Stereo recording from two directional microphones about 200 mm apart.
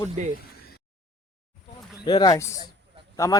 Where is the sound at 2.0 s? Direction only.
20° left (ahead or behind).